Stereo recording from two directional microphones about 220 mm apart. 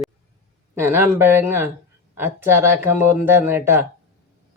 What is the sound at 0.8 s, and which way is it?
Speech, 10° right (ahead or behind).